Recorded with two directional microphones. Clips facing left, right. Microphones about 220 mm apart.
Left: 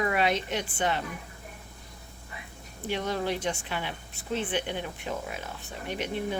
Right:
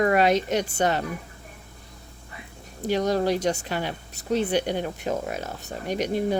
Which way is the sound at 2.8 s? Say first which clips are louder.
Right 7 dB; 40° right (ahead or behind).